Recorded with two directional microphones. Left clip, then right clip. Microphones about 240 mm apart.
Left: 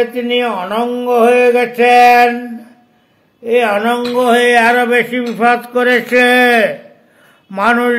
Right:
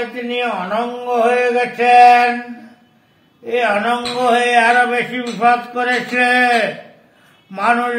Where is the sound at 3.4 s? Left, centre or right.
Left.